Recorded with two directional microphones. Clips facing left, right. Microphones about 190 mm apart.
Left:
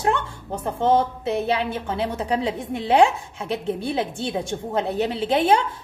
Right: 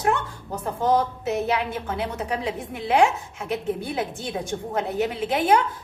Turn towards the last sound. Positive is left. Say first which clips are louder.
# left 2 dB
turn(degrees=30)  # may be behind; listen again after turning